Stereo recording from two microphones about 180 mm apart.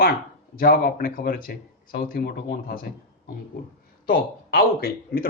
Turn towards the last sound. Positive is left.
turn(degrees=55)  # may be behind; listen again after turning